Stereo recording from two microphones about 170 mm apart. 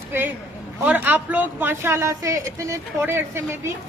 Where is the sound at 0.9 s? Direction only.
10° right (ahead or behind).